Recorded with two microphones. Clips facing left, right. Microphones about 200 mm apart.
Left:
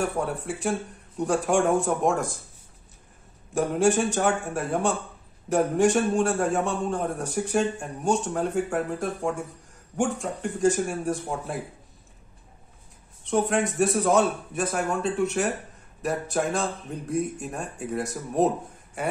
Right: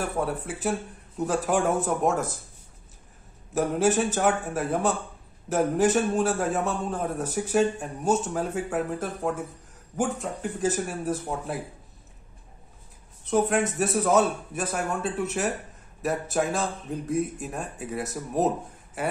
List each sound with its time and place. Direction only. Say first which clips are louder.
0.0 s a man's voice: left 1 dB; centre (ahead or behind)
3.5 s a man's voice: left 1 dB; centre (ahead or behind)
13.2 s a man's voice: even; 5° right (ahead or behind)